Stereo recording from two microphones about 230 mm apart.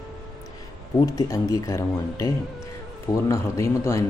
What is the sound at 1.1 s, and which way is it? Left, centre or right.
Speech, centre.